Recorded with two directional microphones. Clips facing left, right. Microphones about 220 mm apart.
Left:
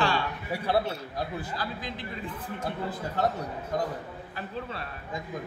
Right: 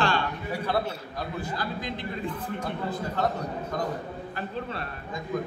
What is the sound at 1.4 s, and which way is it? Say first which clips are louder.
A man's voice: right 3 dB; 5° left (ahead or behind).